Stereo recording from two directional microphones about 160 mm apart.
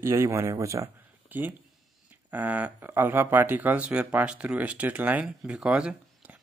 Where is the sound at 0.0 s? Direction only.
20° right (ahead or behind).